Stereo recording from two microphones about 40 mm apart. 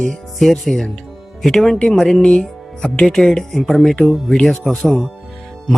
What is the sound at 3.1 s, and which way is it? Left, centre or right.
Speech, centre.